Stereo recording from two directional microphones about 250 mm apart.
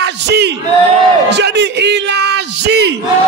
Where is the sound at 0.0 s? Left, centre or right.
Right.